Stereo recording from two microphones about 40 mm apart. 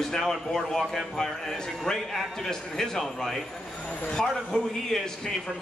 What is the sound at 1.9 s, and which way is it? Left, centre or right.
A man's voice, centre.